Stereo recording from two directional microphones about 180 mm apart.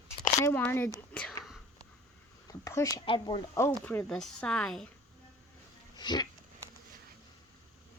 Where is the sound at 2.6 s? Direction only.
20° left (ahead or behind).